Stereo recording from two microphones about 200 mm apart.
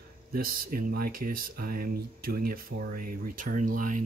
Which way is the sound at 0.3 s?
45° right (ahead or behind).